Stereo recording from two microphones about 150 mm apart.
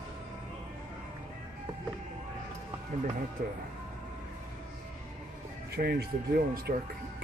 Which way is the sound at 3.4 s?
70° right (ahead or behind).